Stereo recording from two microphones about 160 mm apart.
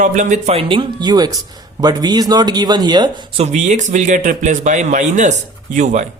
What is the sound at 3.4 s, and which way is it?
Speech, 45° right (ahead or behind).